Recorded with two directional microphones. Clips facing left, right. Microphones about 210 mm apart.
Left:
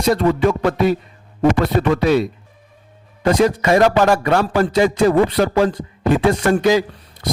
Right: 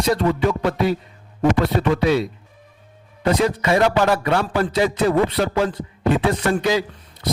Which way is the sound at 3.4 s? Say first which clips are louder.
Left 5 dB; 45° left (ahead or behind).